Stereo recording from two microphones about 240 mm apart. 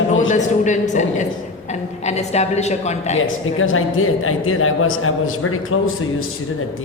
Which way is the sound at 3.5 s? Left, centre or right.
Left.